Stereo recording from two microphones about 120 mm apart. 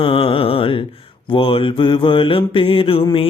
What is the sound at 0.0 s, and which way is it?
Mantra, 45° left (ahead or behind).